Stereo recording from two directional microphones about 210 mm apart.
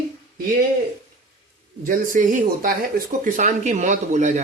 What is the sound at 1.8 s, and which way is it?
Speech, 40° right (ahead or behind).